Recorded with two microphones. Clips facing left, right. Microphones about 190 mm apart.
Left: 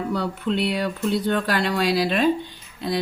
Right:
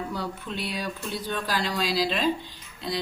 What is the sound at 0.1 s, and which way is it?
Speech, 65° left (ahead or behind).